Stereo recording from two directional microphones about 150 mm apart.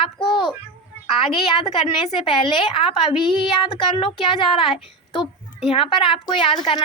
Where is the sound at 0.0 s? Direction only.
35° left (ahead or behind).